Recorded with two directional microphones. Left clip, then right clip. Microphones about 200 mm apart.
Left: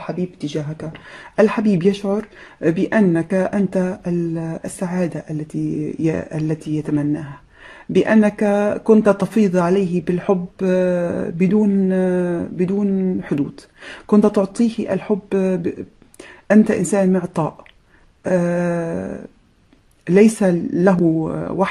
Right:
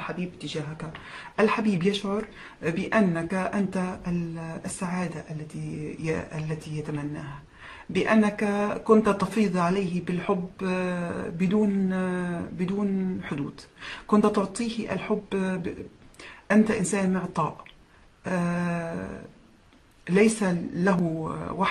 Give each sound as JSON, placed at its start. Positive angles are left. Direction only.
{"t": 0.0, "sound": "speech", "side_deg": 35}
{"t": 13.8, "sound": "speech", "side_deg": 35}